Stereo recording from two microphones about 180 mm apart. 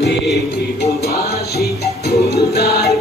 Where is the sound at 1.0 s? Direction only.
60° left (ahead or behind).